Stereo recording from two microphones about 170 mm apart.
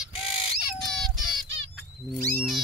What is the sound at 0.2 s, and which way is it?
Bird, 30° left (ahead or behind).